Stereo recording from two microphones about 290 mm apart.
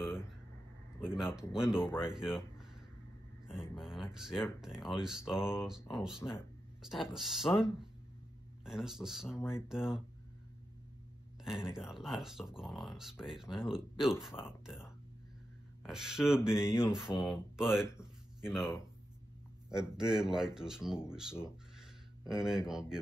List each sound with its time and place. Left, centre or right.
1.0 s speech: centre
3.7 s speech: centre
8.6 s speech: centre
11.4 s speech: centre
17.9 s a sound: centre
19.7 s speech: centre